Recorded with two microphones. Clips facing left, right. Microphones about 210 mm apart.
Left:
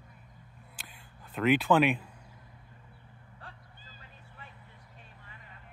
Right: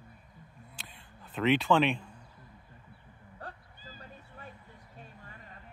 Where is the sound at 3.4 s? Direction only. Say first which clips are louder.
Right 6 dB; 45° right (ahead or behind).